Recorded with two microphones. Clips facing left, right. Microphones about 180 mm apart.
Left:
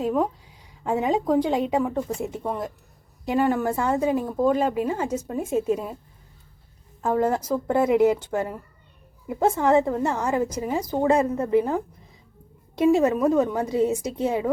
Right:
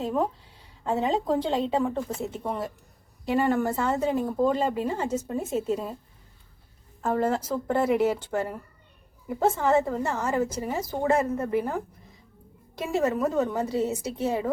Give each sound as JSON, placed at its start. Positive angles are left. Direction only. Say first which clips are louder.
{"t": 0.0, "sound": "a woman's voice", "louder": "left 3 dB", "side_deg": 10}
{"t": 7.0, "sound": "a woman's voice", "louder": "left 3 dB", "side_deg": 10}